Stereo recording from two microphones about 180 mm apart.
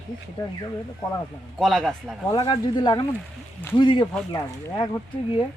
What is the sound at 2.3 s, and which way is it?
Speech, 30° left (ahead or behind).